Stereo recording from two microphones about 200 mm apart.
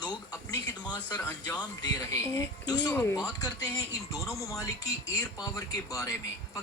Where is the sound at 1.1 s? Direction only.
10° left (ahead or behind).